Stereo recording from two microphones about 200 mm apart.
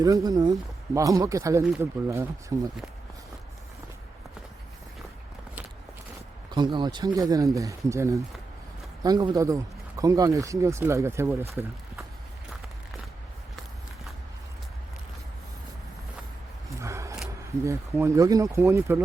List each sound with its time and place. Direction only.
0.0 s speech: 20° right (ahead or behind)
6.5 s speech: 20° right (ahead or behind)
16.6 s a sound: 15° right (ahead or behind)
17.7 s speech: 15° right (ahead or behind)